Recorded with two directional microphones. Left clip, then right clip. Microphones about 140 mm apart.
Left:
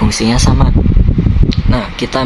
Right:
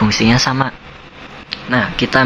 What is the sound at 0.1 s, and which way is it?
Speech, 40° left (ahead or behind).